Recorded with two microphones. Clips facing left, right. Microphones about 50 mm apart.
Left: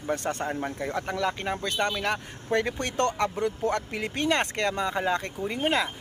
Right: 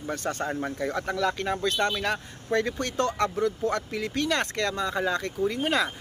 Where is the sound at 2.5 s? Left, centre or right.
Left.